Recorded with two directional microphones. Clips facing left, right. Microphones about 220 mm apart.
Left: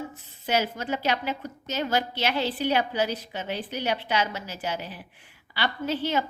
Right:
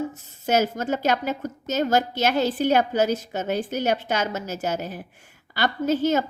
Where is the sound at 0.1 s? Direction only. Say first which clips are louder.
Right 4 dB; 45° right (ahead or behind).